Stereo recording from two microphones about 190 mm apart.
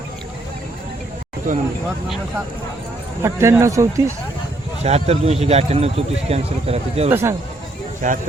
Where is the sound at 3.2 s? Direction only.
15° right (ahead or behind).